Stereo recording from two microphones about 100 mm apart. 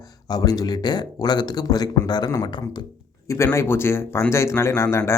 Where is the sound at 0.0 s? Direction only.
40° left (ahead or behind).